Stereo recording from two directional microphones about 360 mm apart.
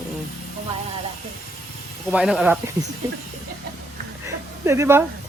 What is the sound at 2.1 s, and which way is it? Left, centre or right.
Speech, centre.